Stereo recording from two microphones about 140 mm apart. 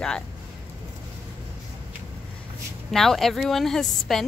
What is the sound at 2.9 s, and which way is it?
A woman's voice, centre (ahead or behind).